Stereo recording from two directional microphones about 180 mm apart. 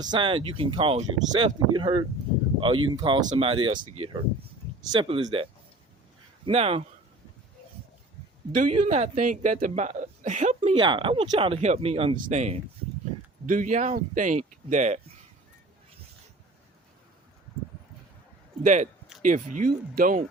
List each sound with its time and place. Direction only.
0.0 s speech: 25° right (ahead or behind)
8.8 s speech: 45° right (ahead or behind)
10.8 s speech: 25° right (ahead or behind)
18.6 s speech: 40° right (ahead or behind)